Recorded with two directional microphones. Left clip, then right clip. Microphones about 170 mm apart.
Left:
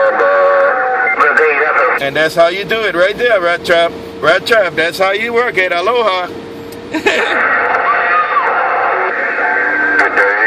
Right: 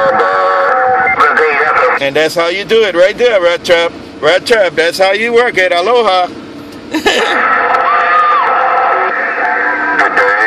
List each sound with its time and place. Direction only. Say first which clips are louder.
0.0 s speech: even; 45° right (ahead or behind)
7.1 s a sound: right 2 dB; 30° right (ahead or behind)
7.3 s music: right 2 dB; 50° right (ahead or behind)